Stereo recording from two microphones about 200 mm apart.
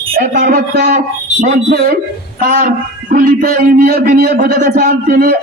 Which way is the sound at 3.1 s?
45° right (ahead or behind).